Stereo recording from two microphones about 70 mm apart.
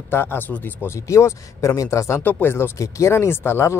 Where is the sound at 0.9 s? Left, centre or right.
Left.